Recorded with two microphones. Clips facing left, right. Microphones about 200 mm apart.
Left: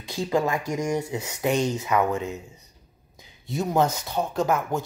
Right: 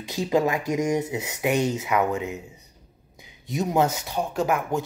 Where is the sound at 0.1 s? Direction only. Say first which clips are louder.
Right 2 dB; 20° right (ahead or behind).